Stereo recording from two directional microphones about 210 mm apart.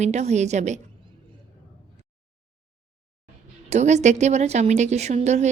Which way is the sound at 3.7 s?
35° right (ahead or behind).